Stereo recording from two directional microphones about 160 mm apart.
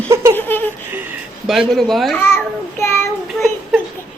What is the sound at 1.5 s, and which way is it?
Speech, centre (ahead or behind).